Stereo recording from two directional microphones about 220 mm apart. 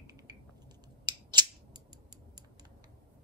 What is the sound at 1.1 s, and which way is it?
Scissors, 20° right (ahead or behind).